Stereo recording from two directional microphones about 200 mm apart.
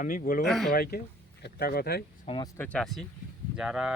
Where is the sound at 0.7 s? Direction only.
50° left (ahead or behind).